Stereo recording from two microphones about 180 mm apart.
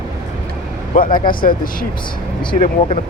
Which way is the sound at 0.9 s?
50° left (ahead or behind).